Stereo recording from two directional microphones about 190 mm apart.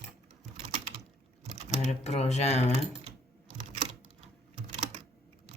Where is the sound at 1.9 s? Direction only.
35° left (ahead or behind).